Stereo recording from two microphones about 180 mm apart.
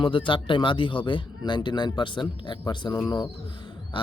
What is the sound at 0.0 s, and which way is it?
Speech, 30° left (ahead or behind).